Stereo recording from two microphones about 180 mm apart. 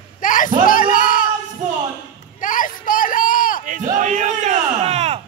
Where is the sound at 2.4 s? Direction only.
50° left (ahead or behind).